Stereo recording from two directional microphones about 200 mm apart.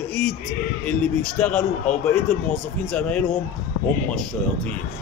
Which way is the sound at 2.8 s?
5° left (ahead or behind).